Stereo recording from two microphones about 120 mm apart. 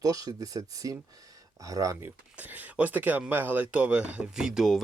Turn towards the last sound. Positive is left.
turn(degrees=-5)  # may be behind; listen again after turning